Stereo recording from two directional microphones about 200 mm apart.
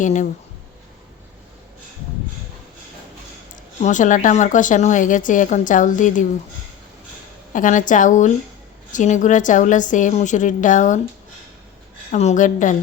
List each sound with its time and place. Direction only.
0.0 s a woman's voice: 40° left (ahead or behind)
3.8 s a woman's voice: 35° left (ahead or behind)
7.5 s a woman's voice: 40° left (ahead or behind)
12.1 s a woman's voice: 35° left (ahead or behind)